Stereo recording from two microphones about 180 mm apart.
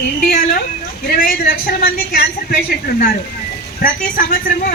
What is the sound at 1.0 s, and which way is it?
A man's voice, 55° left (ahead or behind).